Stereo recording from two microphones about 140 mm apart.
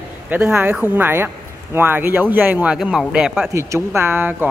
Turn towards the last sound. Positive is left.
turn(degrees=-15)  # may be behind; listen again after turning